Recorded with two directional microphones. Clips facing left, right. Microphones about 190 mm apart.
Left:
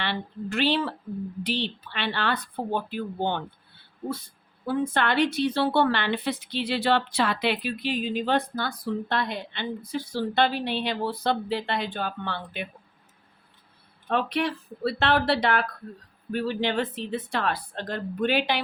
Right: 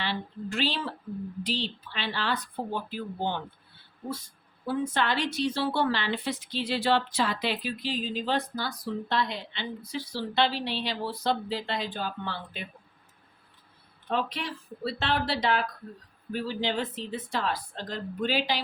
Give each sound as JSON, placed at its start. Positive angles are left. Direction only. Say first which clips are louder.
{"t": 0.0, "sound": "a woman's voice", "louder": "left 2 dB", "side_deg": 60}
{"t": 4.6, "sound": "a woman's voice", "louder": "left 3 dB", "side_deg": 55}
{"t": 14.1, "sound": "a woman's voice", "louder": "left 5 dB", "side_deg": 65}